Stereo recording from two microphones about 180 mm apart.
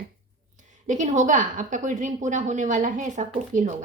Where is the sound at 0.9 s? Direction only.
45° right (ahead or behind).